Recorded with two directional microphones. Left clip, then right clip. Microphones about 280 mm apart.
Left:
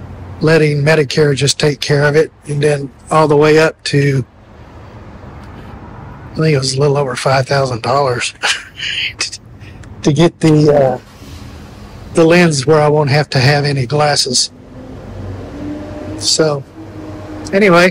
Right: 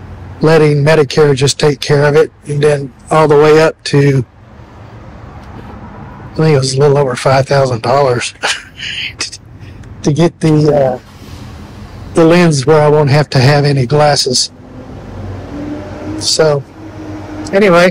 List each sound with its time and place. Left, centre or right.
0.4 s speech: centre
6.3 s speech: centre
10.0 s a man's voice: centre
10.5 s speech: centre
12.1 s speech: centre
16.2 s a man's voice: centre